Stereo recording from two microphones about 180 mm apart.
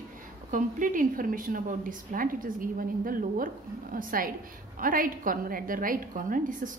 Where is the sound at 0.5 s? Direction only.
45° right (ahead or behind).